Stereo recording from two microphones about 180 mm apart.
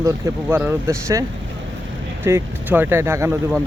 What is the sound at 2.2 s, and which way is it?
Speech, 10° right (ahead or behind).